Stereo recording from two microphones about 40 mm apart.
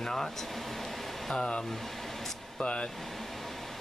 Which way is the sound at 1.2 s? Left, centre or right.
Centre.